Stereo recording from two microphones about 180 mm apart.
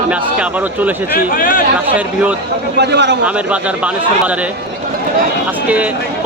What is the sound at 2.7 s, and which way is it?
Speech, 70° right (ahead or behind).